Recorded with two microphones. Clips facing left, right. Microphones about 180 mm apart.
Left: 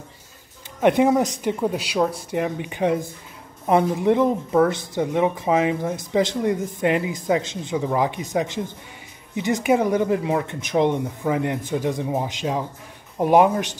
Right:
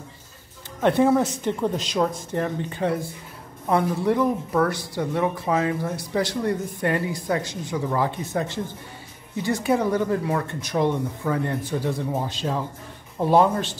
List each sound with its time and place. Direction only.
0.7 s speech: 15° left (ahead or behind)